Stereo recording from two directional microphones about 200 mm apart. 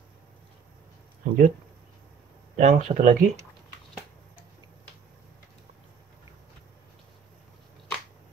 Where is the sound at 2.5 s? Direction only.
35° right (ahead or behind).